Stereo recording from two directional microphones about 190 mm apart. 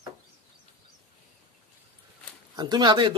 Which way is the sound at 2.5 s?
20° right (ahead or behind).